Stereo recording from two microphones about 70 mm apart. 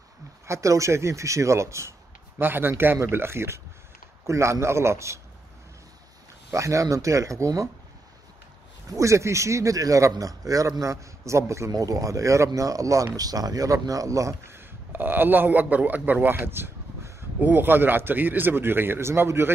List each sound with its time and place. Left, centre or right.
0.5 s speech: right
2.4 s a man's voice: right
6.5 s speech: right
8.9 s speech: right
11.7 s speech: right
14.5 s a man's voice: right